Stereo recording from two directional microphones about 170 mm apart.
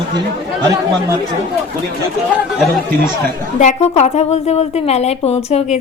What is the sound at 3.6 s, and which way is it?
A woman's voice, 40° left (ahead or behind).